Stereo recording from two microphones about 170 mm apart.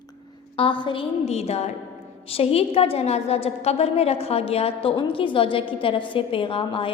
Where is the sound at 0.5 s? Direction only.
30° left (ahead or behind).